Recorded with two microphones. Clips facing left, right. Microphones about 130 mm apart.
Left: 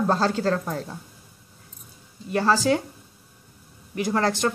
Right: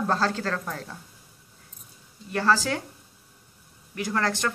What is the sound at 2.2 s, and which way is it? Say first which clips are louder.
Speech: left 3 dB; 20° left (ahead or behind).